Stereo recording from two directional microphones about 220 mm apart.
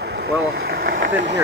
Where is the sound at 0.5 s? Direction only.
45° right (ahead or behind).